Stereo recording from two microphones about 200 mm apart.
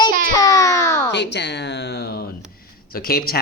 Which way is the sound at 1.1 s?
60° left (ahead or behind).